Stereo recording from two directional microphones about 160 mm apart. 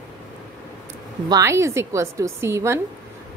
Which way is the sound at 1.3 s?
15° right (ahead or behind).